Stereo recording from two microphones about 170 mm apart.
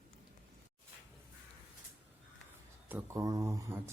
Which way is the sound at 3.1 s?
20° right (ahead or behind).